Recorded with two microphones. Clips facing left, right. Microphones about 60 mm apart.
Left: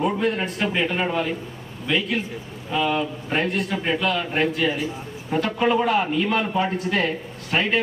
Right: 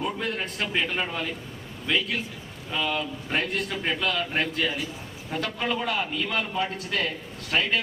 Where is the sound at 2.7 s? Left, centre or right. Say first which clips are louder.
Left 6 dB; left.